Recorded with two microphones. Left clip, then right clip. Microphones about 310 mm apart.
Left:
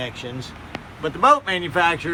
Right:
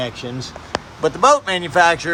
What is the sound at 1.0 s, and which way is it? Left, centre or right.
Speech, centre.